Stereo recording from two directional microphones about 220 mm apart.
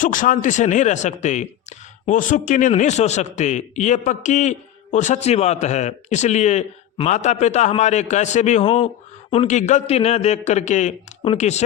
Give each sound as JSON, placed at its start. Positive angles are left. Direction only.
{"t": 0.0, "sound": "a man's voice", "side_deg": 35}